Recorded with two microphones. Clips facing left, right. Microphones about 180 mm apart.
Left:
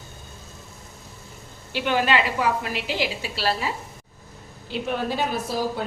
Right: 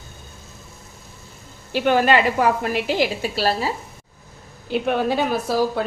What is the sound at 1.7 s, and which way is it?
A woman's voice, 45° right (ahead or behind).